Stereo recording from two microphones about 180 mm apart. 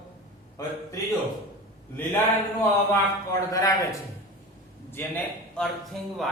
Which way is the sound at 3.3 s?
15° left (ahead or behind).